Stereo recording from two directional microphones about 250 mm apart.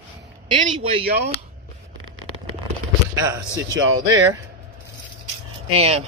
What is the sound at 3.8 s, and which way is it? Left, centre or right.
Speech, right.